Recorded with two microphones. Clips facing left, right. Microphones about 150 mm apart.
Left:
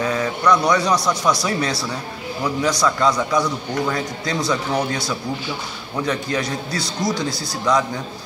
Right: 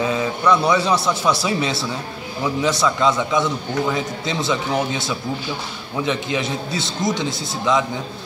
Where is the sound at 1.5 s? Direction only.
25° right (ahead or behind).